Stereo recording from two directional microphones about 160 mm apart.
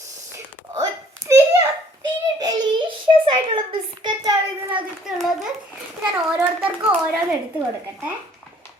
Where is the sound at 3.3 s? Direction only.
30° right (ahead or behind).